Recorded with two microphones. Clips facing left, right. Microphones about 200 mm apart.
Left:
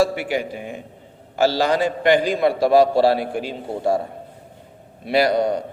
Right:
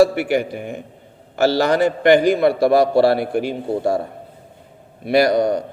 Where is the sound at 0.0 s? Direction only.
60° right (ahead or behind).